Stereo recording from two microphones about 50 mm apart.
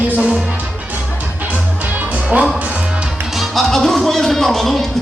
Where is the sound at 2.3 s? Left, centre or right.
Right.